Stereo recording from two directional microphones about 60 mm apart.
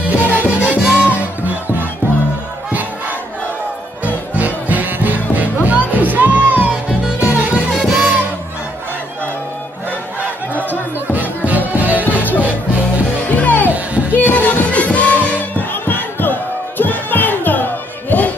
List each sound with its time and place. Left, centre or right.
0.4 s music: right
2.7 s crowd: right
4.0 s music: right
10.5 s music: left
11.1 s music: right
12.1 s music: left
13.7 s music: right
14.1 s music: left